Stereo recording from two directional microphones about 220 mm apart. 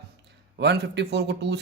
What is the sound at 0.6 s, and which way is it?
Speech, 50° right (ahead or behind).